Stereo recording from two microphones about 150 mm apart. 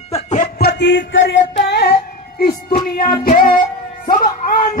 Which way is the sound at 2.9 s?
75° left (ahead or behind).